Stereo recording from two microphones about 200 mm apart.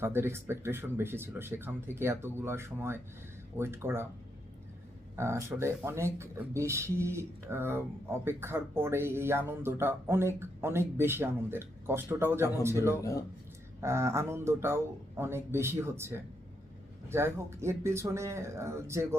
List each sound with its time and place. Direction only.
0.0 s speech: 10° right (ahead or behind)
5.1 s speech: 15° right (ahead or behind)
13.0 s speech: 15° left (ahead or behind)
13.8 s speech: 15° right (ahead or behind)